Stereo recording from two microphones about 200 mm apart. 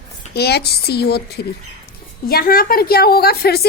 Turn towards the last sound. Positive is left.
turn(degrees=50)  # may be behind; listen again after turning